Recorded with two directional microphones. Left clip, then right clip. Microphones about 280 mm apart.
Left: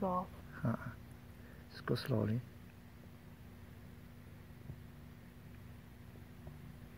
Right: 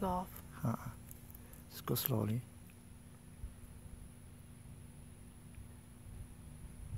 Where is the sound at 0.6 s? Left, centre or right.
Centre.